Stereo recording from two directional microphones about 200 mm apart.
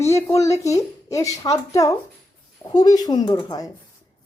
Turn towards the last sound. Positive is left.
turn(degrees=20)  # may be behind; listen again after turning